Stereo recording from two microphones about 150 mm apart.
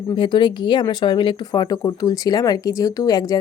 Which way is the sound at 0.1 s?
30° left (ahead or behind).